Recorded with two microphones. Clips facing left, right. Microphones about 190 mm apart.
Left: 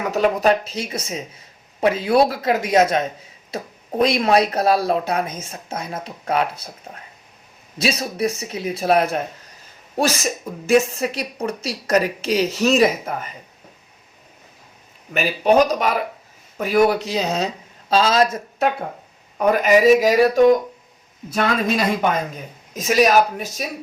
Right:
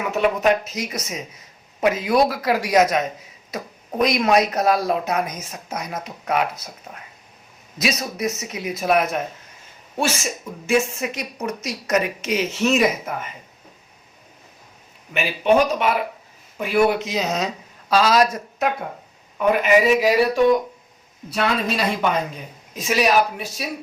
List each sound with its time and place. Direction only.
0.0 s speech: 35° left (ahead or behind)
15.1 s speech: 40° left (ahead or behind)
19.4 s a woman's voice: 40° left (ahead or behind)